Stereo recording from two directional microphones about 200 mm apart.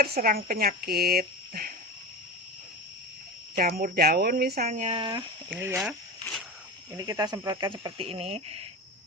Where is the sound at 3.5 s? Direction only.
50° right (ahead or behind); by 5.2 s 25° right (ahead or behind).